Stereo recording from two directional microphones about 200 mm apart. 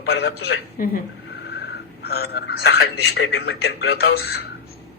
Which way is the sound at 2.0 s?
50° left (ahead or behind).